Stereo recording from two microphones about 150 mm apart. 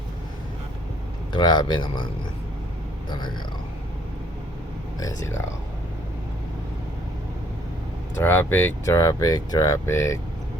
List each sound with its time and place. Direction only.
1.3 s speech: 30° left (ahead or behind)
3.1 s speech: 30° left (ahead or behind)
4.9 s speech: 20° left (ahead or behind)
8.1 s speech: 15° left (ahead or behind)